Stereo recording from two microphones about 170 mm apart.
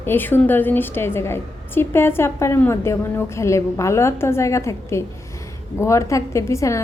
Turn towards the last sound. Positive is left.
turn(degrees=15)  # may be behind; listen again after turning